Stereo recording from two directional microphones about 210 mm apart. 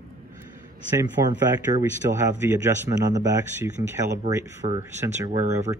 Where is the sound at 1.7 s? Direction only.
10° right (ahead or behind).